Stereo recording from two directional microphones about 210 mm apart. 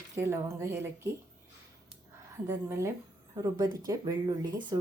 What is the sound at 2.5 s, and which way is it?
Speech, 15° right (ahead or behind).